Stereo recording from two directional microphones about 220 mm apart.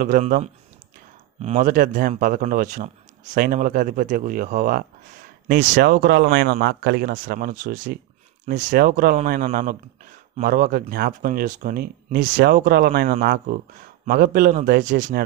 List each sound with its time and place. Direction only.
0.0 s speech: 40° right (ahead or behind)